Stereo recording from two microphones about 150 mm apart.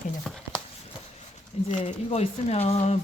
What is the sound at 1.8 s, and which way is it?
Speech, 40° left (ahead or behind).